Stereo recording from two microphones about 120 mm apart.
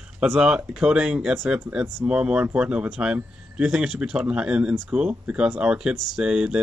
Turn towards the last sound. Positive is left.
turn(degrees=-5)  # may be behind; listen again after turning